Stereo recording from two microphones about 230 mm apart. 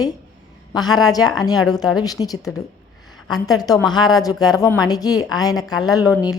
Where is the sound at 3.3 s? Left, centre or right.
Centre.